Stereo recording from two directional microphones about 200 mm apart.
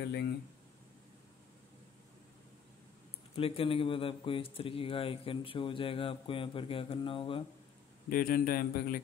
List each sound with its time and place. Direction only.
3.3 s speech: 30° left (ahead or behind)
8.1 s speech: 45° left (ahead or behind)